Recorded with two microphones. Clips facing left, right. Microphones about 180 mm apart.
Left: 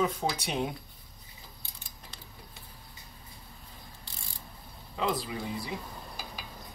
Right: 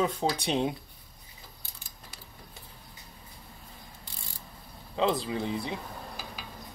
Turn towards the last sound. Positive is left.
turn(degrees=-25)  # may be behind; listen again after turning